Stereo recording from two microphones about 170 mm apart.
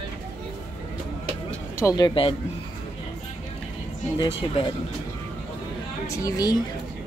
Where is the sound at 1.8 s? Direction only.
20° left (ahead or behind).